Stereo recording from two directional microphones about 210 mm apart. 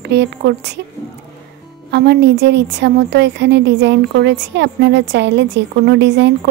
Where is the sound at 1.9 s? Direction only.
55° right (ahead or behind).